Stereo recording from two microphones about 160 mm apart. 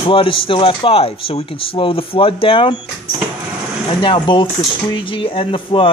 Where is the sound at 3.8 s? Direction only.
30° left (ahead or behind).